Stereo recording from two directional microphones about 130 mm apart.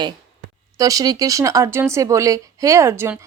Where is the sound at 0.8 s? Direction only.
30° right (ahead or behind).